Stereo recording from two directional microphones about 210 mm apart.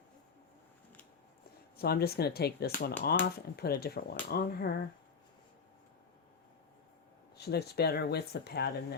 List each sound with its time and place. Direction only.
1.8 s speech: 50° left (ahead or behind)
7.3 s speech: 50° left (ahead or behind)